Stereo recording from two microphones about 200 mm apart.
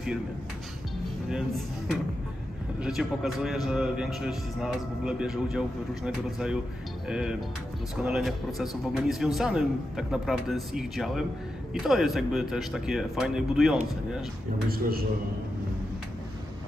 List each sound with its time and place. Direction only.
2.8 s a man's voice: 5° right (ahead or behind)
14.7 s a man's voice: 50° right (ahead or behind)